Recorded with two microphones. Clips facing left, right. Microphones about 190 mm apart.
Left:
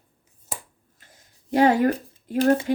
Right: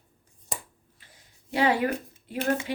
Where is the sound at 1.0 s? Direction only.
45° left (ahead or behind).